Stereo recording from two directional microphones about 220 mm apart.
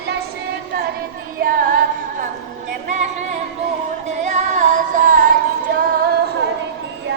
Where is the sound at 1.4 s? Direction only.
40° right (ahead or behind).